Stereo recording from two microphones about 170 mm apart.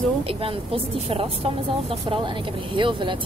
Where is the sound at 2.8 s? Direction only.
30° right (ahead or behind).